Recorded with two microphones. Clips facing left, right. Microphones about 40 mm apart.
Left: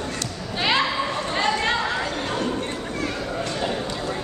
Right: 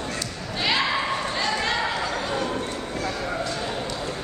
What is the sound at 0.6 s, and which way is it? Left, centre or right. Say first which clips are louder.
Basketball bounce: left 2 dB; centre.